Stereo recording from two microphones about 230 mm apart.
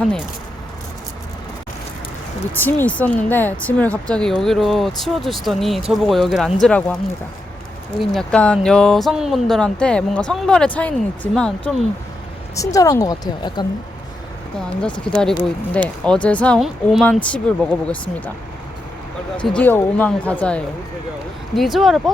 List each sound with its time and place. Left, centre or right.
2.6 s a woman's voice: centre
12.5 s a woman's voice: centre
15.0 s speech: centre
19.5 s speech: centre